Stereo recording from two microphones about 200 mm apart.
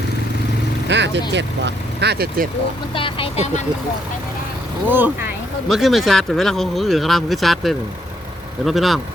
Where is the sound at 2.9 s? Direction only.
25° left (ahead or behind).